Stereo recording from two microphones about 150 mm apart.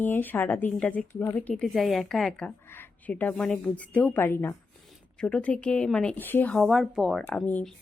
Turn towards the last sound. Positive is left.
turn(degrees=10)  # may be behind; listen again after turning